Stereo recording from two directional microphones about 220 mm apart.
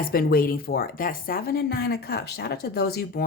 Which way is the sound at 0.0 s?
40° left (ahead or behind).